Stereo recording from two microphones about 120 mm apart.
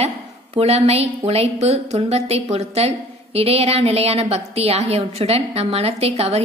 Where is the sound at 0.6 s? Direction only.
60° right (ahead or behind).